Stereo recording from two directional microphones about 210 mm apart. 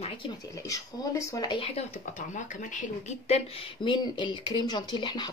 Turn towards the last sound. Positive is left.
turn(degrees=20)  # may be behind; listen again after turning